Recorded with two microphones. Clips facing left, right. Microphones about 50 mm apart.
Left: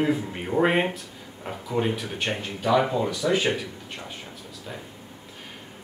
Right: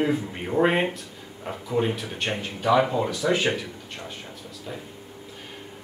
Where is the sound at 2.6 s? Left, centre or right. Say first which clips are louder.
Right 1 dB; centre.